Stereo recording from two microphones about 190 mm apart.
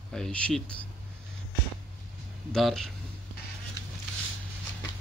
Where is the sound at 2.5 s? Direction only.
Centre (ahead or behind).